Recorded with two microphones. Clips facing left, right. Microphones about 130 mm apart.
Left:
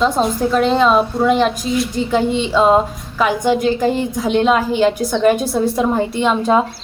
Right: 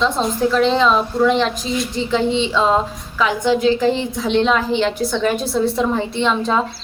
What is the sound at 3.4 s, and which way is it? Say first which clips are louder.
Speech: right 2 dB; 50° left (ahead or behind).